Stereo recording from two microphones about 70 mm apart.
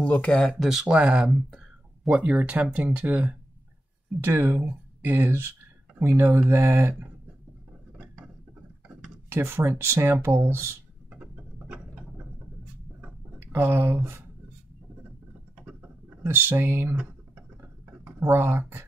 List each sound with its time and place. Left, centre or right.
0.0 s speech: centre
0.6 s speech: centre
0.9 s speech: centre
8.8 s speech: right
11.1 s a sound: right
13.0 s a sound: right
16.2 s speech: right
18.0 s speech: right